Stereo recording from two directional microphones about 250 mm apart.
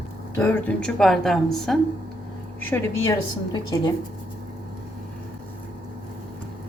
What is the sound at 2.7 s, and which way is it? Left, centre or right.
A woman's voice, centre.